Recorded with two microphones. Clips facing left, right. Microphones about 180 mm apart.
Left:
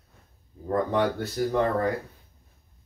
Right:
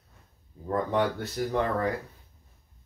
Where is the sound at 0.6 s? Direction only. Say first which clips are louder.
Left 2 dB; 40° left (ahead or behind).